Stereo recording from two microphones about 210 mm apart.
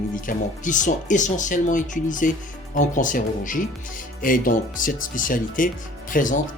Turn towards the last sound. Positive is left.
turn(degrees=40)  # may be behind; listen again after turning